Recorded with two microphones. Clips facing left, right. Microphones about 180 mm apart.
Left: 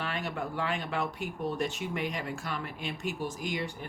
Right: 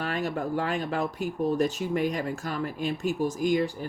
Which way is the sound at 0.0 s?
40° right (ahead or behind).